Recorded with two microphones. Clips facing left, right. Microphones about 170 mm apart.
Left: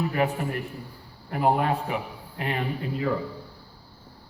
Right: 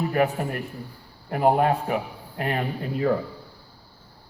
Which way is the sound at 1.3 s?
45° right (ahead or behind).